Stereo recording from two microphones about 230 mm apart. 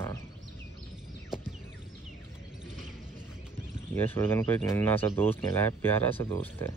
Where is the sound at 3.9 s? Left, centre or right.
Centre.